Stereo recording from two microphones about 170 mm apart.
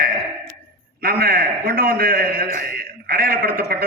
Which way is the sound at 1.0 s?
65° right (ahead or behind).